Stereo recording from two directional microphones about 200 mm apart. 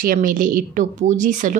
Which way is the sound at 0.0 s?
45° right (ahead or behind).